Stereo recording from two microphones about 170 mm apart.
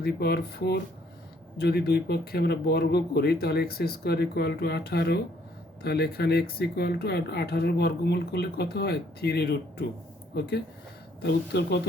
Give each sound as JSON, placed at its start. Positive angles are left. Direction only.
{"t": 0.0, "sound": "speech", "side_deg": 70}
{"t": 11.2, "sound": "speech", "side_deg": 75}